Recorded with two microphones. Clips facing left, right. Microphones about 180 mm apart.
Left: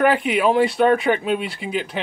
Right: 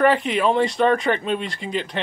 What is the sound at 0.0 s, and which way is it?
A man's voice, 5° left (ahead or behind).